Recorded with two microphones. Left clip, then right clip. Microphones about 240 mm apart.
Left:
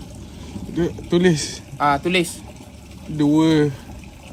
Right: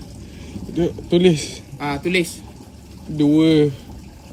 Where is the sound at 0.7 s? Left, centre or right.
Right.